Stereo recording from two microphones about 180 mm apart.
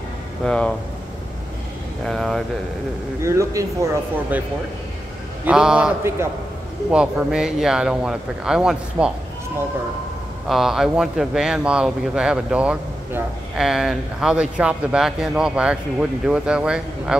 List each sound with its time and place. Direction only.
0.5 s speech: 5° left (ahead or behind)
2.0 s speech: centre (ahead or behind)
3.2 s speech: 15° right (ahead or behind)
5.4 s speech: 5° right (ahead or behind)
10.5 s speech: centre (ahead or behind)